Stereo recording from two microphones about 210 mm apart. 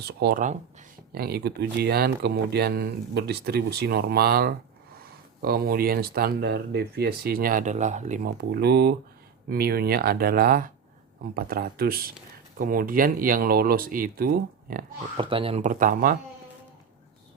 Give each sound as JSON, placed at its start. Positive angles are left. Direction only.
{"t": 0.0, "sound": "speech", "side_deg": -50}
{"t": 15.2, "sound": "speech", "side_deg": -25}